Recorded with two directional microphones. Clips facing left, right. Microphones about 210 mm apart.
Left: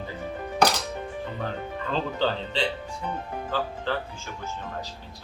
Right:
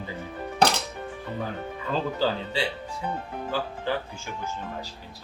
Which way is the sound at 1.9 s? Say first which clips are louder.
Right 1 dB; 5° right (ahead or behind).